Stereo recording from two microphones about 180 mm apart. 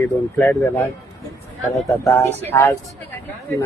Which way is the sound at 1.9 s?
15° left (ahead or behind).